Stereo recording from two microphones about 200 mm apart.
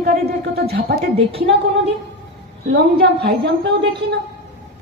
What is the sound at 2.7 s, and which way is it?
Speech, 55° right (ahead or behind).